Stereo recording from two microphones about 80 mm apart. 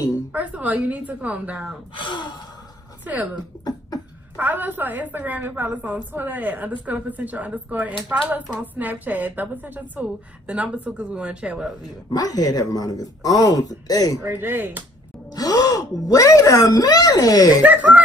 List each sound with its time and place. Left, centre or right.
0.3 s a woman's voice: centre
2.0 s gasp: left
4.4 s a woman's voice: right
12.1 s speech: left
14.2 s a woman's voice: right
15.3 s speech: left
17.6 s a woman's voice: centre